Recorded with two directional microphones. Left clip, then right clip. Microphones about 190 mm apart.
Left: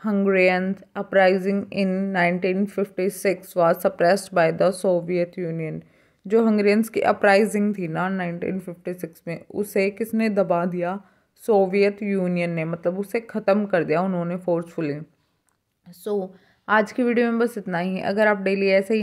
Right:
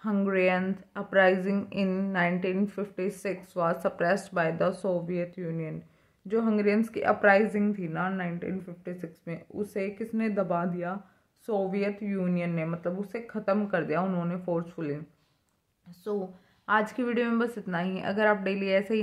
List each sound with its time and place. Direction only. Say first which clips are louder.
0.0 s speech: left 7 dB; 25° left (ahead or behind)